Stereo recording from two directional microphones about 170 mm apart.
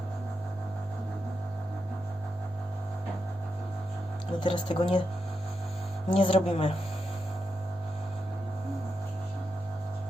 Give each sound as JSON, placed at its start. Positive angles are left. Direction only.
{"t": 4.4, "sound": "speech", "side_deg": 30}
{"t": 6.1, "sound": "a woman's voice", "side_deg": 30}